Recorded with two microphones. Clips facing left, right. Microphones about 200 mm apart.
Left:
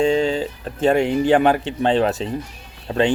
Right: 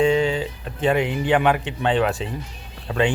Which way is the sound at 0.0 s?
40° left (ahead or behind).